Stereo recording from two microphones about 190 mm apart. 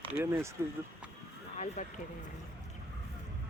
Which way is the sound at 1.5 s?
35° left (ahead or behind).